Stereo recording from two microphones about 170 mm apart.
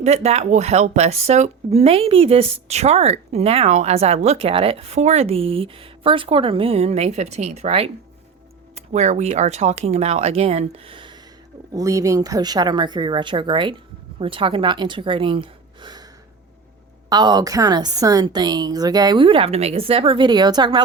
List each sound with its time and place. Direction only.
0.0 s speech: 40° right (ahead or behind)
11.7 s a woman's voice: 20° right (ahead or behind)
17.1 s a woman's voice: 25° right (ahead or behind)